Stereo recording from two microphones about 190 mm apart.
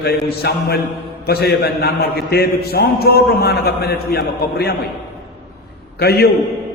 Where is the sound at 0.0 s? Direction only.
55° left (ahead or behind).